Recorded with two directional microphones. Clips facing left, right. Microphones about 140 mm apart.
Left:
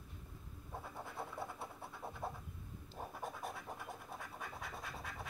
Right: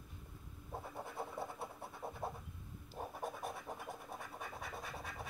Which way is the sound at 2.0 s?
15° right (ahead or behind).